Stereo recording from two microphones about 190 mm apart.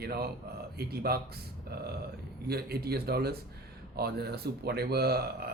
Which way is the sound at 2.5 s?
55° right (ahead or behind).